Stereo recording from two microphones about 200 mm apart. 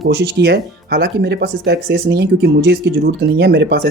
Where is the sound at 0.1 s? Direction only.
55° right (ahead or behind).